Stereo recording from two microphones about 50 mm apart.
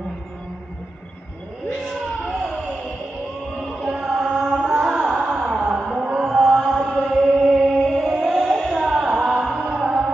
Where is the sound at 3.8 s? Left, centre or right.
Centre.